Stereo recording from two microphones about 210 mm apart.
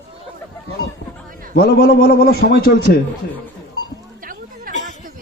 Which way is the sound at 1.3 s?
40° right (ahead or behind).